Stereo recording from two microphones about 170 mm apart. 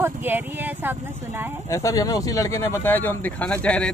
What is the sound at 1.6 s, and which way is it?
Speech, 20° left (ahead or behind).